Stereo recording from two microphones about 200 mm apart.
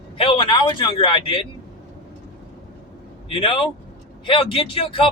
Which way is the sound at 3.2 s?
25° left (ahead or behind).